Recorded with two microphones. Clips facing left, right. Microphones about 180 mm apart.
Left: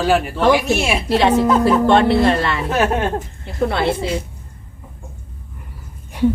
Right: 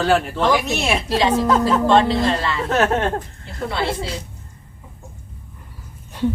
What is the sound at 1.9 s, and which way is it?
Speech, 65° left (ahead or behind).